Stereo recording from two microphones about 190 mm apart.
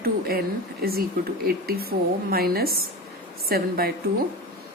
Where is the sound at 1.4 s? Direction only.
55° right (ahead or behind).